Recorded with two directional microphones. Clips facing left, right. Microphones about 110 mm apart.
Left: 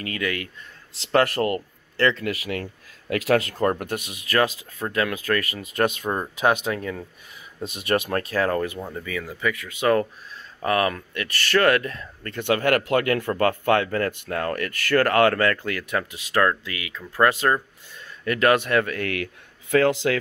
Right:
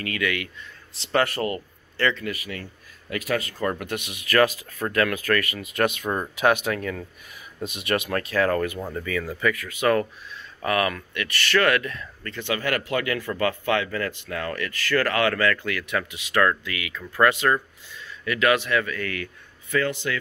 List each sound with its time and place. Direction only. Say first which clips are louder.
0.0 s speech: right 1 dB; 35° left (ahead or behind)
1.1 s speech: left 3 dB; 55° left (ahead or behind)
2.2 s speech: left 4 dB; 85° left
3.1 s speech: left 6 dB; 75° left (ahead or behind)
3.6 s speech: left 4 dB; 40° left (ahead or behind); by 7.1 s 20° left (ahead or behind)
7.6 s speech: left 2 dB; 35° left (ahead or behind)
8.7 s speech: right 2 dB; centre (ahead or behind)
9.0 s speech: right 2 dB; 10° left (ahead or behind); by 12.4 s 35° left (ahead or behind)
12.4 s a man's voice: left 6 dB; 55° left (ahead or behind); by 17.6 s 35° left (ahead or behind)
17.9 s speech: left 2 dB; 45° left (ahead or behind); by 20.2 s 90° left